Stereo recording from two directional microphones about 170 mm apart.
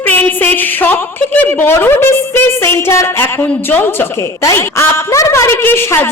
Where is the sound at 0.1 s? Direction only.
10° left (ahead or behind).